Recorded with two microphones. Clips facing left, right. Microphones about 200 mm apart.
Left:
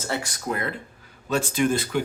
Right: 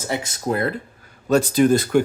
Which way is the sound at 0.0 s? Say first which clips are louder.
Right 4 dB; 20° right (ahead or behind).